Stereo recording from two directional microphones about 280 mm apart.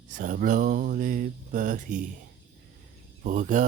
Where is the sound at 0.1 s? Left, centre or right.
Right.